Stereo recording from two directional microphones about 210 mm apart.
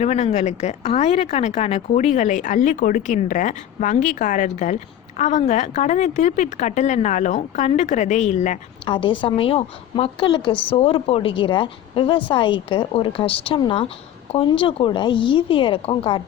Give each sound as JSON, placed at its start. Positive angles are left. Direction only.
{"t": 0.0, "sound": "a woman's voice", "side_deg": 30}
{"t": 8.8, "sound": "a woman's voice", "side_deg": 25}